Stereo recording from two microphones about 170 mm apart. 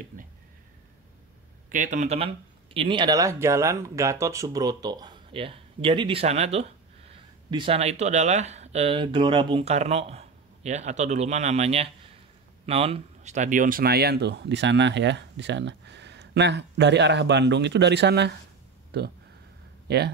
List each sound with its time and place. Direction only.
1.7 s speech: 45° right (ahead or behind); by 18.3 s 90° right
18.9 s speech: 70° right (ahead or behind)